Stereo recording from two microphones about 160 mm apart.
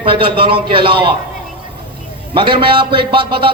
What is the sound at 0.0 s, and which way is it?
A man's voice, 30° right (ahead or behind).